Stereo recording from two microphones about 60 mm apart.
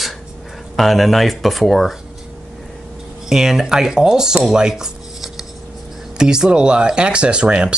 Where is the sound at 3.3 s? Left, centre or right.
Centre.